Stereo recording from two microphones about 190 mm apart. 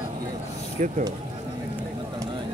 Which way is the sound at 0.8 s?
40° right (ahead or behind).